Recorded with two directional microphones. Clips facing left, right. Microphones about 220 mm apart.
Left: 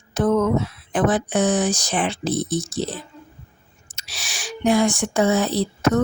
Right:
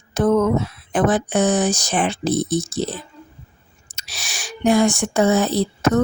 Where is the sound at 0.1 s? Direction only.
45° right (ahead or behind).